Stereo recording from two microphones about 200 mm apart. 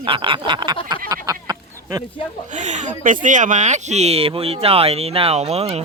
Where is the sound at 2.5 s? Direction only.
35° right (ahead or behind).